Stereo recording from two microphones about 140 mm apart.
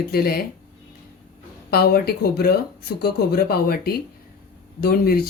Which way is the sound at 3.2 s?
90° left.